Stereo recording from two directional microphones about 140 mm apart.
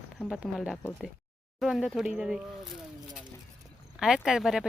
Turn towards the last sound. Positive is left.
turn(degrees=-5)  # may be behind; listen again after turning